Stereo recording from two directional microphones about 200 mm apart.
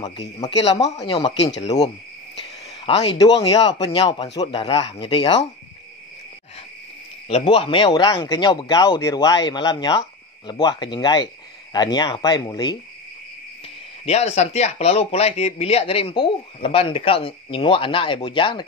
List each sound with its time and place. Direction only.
0.9 s speech: 25° left (ahead or behind)
2.4 s speech: 25° left (ahead or behind)
7.2 s speech: 25° left (ahead or behind)
14.0 s speech: 35° left (ahead or behind)